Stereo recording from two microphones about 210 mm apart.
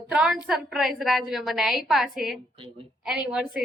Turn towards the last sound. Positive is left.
turn(degrees=-5)  # may be behind; listen again after turning